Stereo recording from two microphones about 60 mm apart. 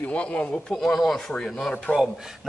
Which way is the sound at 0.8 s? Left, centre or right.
Centre.